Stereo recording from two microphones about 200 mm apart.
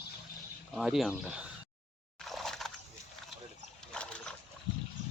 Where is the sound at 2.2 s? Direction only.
Centre (ahead or behind).